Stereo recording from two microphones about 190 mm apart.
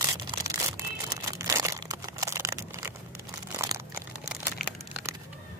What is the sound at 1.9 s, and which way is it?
Computer keyboard, 20° right (ahead or behind).